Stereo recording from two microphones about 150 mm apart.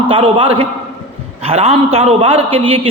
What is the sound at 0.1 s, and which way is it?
A man's voice, 40° right (ahead or behind).